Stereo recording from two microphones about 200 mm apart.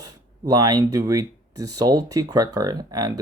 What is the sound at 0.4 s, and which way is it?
Speech, 20° right (ahead or behind).